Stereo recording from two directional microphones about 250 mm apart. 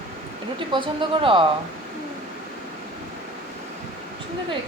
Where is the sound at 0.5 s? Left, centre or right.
Centre.